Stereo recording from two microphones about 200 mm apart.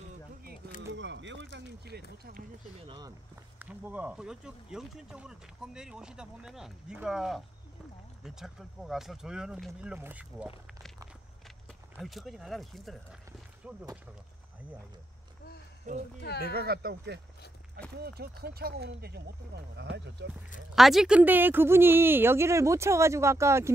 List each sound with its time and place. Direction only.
0.9 s run: 65° right (ahead or behind); by 2.4 s 50° right (ahead or behind)
3.5 s speech: 10° right (ahead or behind)
12.0 s speech: centre (ahead or behind)
15.9 s speech: 40° right (ahead or behind)
16.5 s speech: 50° right (ahead or behind)
20.7 s speech: centre (ahead or behind)